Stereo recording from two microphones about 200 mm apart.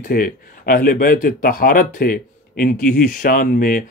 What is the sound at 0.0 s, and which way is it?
Speech, 45° left (ahead or behind).